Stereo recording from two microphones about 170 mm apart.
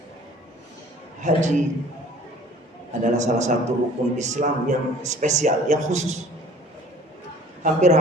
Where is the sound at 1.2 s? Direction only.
45° right (ahead or behind).